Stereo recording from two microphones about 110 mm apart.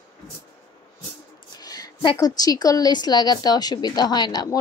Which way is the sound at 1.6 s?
35° left (ahead or behind).